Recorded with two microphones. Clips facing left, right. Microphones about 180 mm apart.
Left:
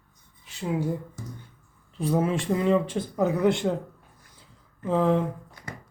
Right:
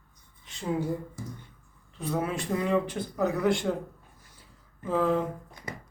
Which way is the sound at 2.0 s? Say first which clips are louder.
Left 5 dB; 30° left (ahead or behind).